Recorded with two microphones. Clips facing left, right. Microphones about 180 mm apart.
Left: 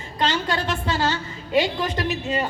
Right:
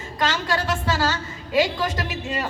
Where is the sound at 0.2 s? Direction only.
20° left (ahead or behind).